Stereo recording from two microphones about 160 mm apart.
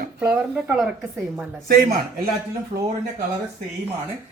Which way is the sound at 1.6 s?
65° right (ahead or behind).